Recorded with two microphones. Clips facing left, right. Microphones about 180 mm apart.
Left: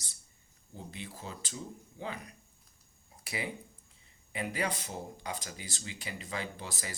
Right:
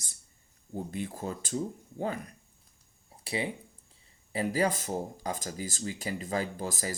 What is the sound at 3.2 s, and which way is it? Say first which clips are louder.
Speech: right 6 dB; 30° right (ahead or behind).